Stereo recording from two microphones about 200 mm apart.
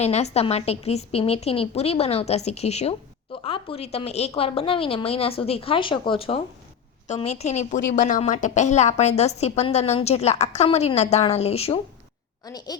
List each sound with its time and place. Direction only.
0.0 s a woman's voice: 35° left (ahead or behind)
12.5 s a woman's voice: 20° left (ahead or behind)